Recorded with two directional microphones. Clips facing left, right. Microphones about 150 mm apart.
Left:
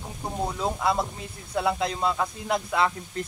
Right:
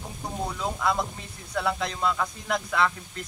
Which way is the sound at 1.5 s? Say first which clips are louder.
Left 3 dB; 30° left (ahead or behind).